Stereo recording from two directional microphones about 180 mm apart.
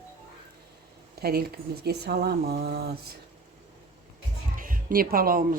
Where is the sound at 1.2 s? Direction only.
60° right (ahead or behind).